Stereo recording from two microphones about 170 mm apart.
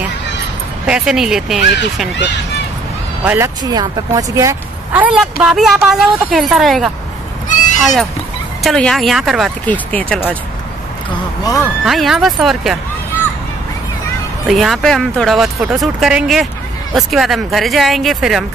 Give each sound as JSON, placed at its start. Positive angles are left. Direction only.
{"t": 0.8, "sound": "speech", "side_deg": -5}
{"t": 3.3, "sound": "speech", "side_deg": -15}
{"t": 11.4, "sound": "speech", "side_deg": 20}
{"t": 11.8, "sound": "speech", "side_deg": 0}
{"t": 14.5, "sound": "speech", "side_deg": 0}